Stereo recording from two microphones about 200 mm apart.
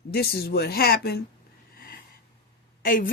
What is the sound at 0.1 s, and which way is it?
Speech, 50° left (ahead or behind).